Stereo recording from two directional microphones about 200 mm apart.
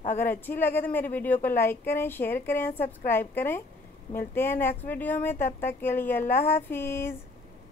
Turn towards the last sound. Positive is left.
turn(degrees=10)  # may be behind; listen again after turning